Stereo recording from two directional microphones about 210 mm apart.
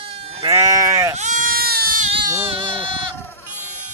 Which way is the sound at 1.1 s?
35° right (ahead or behind).